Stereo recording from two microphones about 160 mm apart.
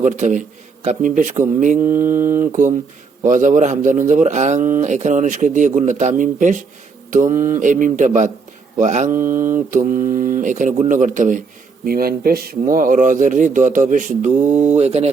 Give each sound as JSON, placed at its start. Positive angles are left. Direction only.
{"t": 0.0, "sound": "speech", "side_deg": -50}
{"t": 2.0, "sound": "mantra", "side_deg": -15}
{"t": 2.5, "sound": "speech", "side_deg": -50}
{"t": 11.9, "sound": "speech", "side_deg": -70}